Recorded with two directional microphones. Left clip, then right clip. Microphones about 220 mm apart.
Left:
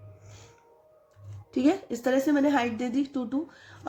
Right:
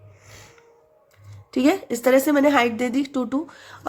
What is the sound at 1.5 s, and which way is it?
Speech, 30° right (ahead or behind).